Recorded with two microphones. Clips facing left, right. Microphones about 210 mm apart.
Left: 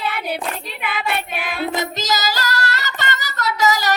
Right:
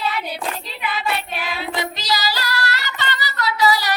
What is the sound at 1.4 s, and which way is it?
Singing, 50° left (ahead or behind).